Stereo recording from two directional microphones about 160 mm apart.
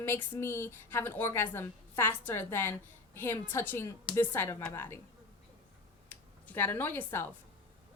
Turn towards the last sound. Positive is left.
turn(degrees=10)  # may be behind; listen again after turning